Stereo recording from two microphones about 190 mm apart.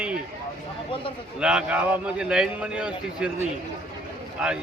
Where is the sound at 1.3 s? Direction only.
5° right (ahead or behind).